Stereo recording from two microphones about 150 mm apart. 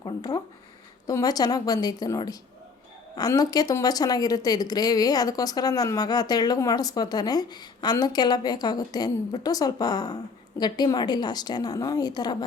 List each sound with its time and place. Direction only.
0.0 s speech: 25° left (ahead or behind)